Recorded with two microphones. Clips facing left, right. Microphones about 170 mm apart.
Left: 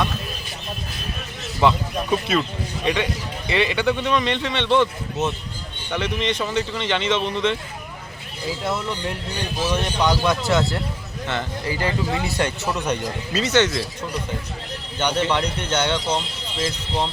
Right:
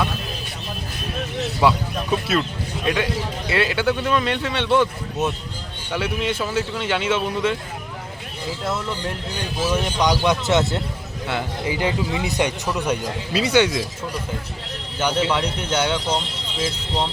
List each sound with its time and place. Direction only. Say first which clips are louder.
1.6 s a man's voice: left 1 dB; 5° right (ahead or behind)
8.6 s a man's voice: even; centre (ahead or behind)
14.9 s a man's voice: even; 5° right (ahead or behind)